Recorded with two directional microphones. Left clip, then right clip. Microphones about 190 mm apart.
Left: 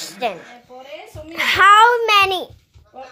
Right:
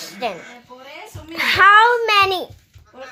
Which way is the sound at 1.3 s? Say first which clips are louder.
Even; 5° left (ahead or behind).